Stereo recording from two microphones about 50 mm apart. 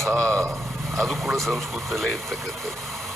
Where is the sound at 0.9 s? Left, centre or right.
Centre.